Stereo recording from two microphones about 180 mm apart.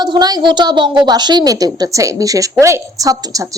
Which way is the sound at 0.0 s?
25° right (ahead or behind).